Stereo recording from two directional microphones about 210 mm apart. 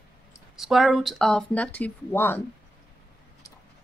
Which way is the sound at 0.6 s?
Centre (ahead or behind).